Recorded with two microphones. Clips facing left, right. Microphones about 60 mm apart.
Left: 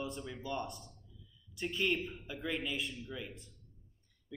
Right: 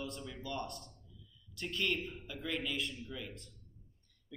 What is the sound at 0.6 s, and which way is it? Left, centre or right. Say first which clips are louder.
Speech: even; right.